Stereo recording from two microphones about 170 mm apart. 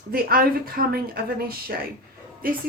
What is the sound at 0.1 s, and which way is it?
A woman's voice, 60° right (ahead or behind).